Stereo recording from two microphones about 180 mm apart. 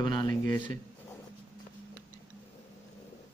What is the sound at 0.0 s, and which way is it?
Speech, 25° left (ahead or behind).